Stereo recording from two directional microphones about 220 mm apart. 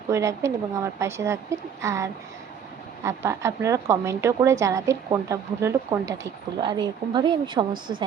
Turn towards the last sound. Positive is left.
turn(degrees=-40)  # may be behind; listen again after turning